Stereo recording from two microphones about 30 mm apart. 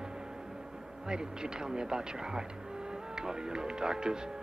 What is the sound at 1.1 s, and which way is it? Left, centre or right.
Speech, right.